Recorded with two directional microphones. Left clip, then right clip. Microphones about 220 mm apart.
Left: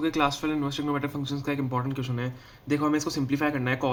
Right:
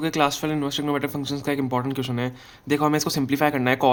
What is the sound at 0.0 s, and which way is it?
Speech, 35° right (ahead or behind).